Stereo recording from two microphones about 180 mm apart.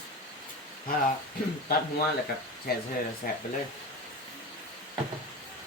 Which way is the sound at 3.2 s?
50° left (ahead or behind).